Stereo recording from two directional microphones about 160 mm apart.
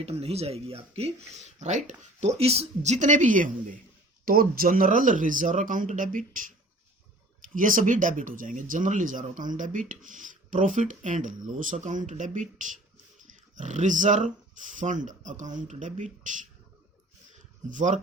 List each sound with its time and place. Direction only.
0.0 s speech: 40° right (ahead or behind)
4.3 s speech: 65° right (ahead or behind)
7.5 s speech: 55° right (ahead or behind)
17.7 s speech: 50° right (ahead or behind)